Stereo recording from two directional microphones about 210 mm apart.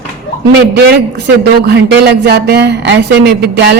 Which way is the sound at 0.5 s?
50° right (ahead or behind).